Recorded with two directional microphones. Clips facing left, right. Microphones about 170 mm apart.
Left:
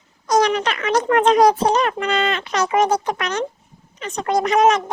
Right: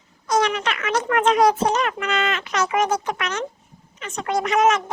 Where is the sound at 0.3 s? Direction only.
40° left (ahead or behind).